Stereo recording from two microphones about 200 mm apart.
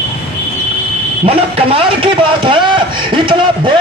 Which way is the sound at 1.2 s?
30° right (ahead or behind).